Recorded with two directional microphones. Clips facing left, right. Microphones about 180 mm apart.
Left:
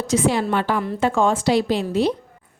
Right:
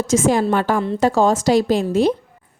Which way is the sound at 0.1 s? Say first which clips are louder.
Right 3 dB; 45° right (ahead or behind).